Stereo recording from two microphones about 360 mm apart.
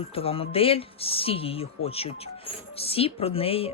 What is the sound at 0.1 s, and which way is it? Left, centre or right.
Speech, centre.